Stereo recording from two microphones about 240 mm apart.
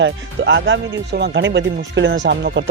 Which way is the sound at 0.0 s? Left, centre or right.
Right.